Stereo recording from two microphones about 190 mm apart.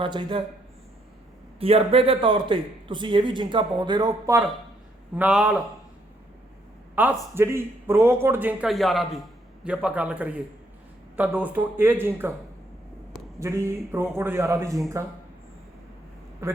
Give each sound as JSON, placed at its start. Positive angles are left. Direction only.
{"t": 0.0, "sound": "a man's voice", "side_deg": -25}
{"t": 1.5, "sound": "a man's voice", "side_deg": -30}
{"t": 5.1, "sound": "a man's voice", "side_deg": -5}
{"t": 6.9, "sound": "a man's voice", "side_deg": -10}
{"t": 13.4, "sound": "a man's voice", "side_deg": -15}
{"t": 16.4, "sound": "a man's voice", "side_deg": -15}